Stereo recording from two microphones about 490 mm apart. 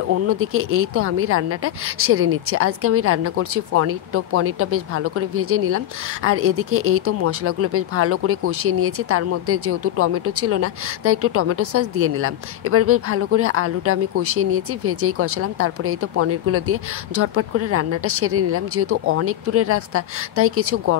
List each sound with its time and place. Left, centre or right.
0.1 s speech: right